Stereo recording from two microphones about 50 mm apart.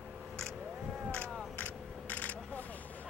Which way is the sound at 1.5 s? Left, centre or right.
Left.